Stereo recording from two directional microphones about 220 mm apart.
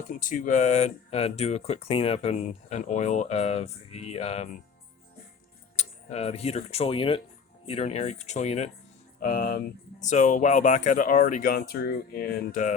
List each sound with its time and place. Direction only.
0.1 s speech: 35° left (ahead or behind)
5.7 s speech: 30° left (ahead or behind)
9.2 s speech: 45° left (ahead or behind)